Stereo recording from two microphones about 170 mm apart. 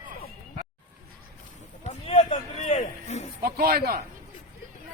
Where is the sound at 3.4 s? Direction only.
65° right (ahead or behind).